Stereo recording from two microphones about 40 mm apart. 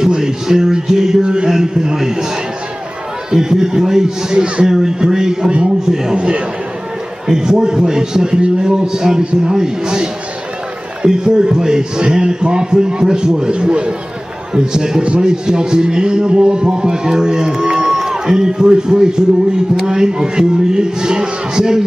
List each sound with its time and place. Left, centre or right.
0.0 s music: centre
1.2 s a man's voice: right
3.3 s a man's voice: centre
6.1 s a man's voice: right
7.2 s a man's voice: centre
11.1 s a man's voice: centre